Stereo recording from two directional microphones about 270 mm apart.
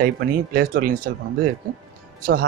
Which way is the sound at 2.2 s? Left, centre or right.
Right.